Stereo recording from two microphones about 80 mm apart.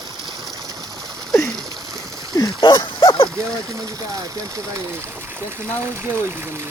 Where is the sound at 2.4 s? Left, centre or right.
Left.